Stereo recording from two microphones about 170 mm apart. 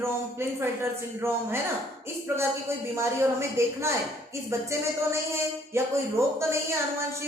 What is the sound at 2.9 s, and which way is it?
A woman's voice, 15° right (ahead or behind).